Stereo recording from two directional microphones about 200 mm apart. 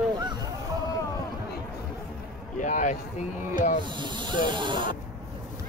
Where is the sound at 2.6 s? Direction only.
40° left (ahead or behind).